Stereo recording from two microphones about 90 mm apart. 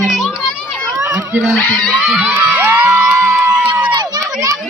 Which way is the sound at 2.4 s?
15° right (ahead or behind).